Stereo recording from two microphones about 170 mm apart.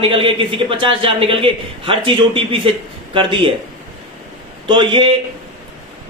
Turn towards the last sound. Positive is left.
turn(degrees=-30)  # may be behind; listen again after turning